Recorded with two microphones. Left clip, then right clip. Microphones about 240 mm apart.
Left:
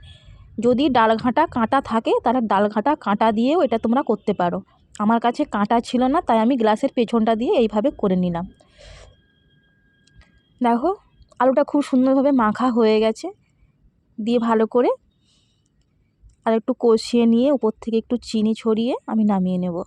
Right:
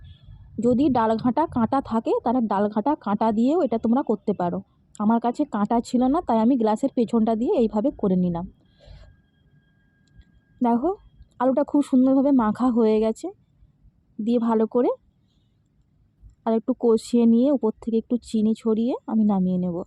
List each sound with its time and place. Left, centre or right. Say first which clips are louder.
0.6 s speech: left 4 dB; left
10.2 s speech: left 2 dB; left
16.4 s speech: left 4 dB; left